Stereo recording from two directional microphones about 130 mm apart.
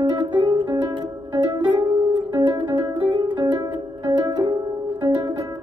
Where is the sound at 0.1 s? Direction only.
35° right (ahead or behind).